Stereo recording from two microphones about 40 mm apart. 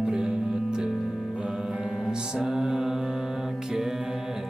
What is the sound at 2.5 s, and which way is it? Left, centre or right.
Music, centre.